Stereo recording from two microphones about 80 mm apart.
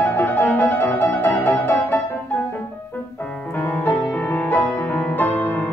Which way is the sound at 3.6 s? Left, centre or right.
Left.